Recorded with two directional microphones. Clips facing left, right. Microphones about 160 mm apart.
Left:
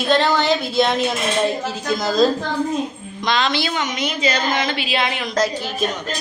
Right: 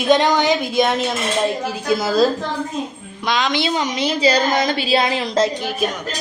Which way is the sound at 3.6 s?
35° right (ahead or behind).